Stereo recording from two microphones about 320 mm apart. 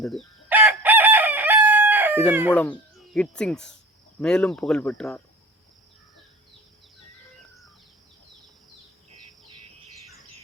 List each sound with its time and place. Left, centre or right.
0.0 s chicken: centre
2.5 s speech: centre